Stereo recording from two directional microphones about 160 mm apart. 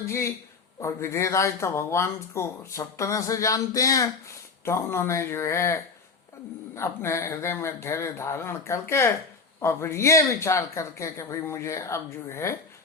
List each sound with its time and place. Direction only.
0.1 s speech: 20° left (ahead or behind)